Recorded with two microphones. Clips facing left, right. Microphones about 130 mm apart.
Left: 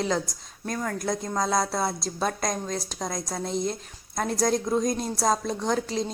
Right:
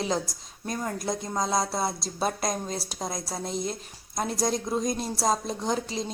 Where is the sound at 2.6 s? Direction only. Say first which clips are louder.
Left 2 dB; 30° right (ahead or behind).